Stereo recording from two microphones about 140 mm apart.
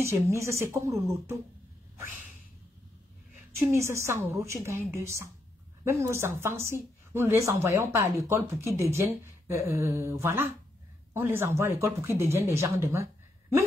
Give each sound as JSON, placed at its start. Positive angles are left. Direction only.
{"t": 0.0, "sound": "speech", "side_deg": -20}
{"t": 3.7, "sound": "speech", "side_deg": -20}